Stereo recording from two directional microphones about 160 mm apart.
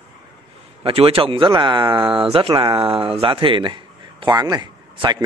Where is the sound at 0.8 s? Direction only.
35° right (ahead or behind).